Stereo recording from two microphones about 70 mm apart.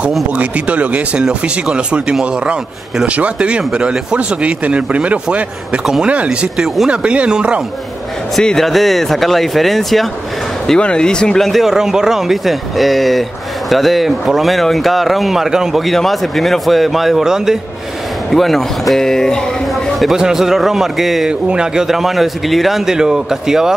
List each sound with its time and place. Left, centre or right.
0.4 s speech: centre
8.4 s speech: centre
10.7 s speech: centre